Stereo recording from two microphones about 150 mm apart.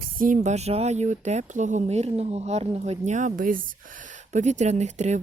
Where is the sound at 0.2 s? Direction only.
55° right (ahead or behind).